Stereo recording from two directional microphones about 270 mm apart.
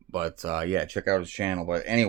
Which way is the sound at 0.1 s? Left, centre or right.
Centre.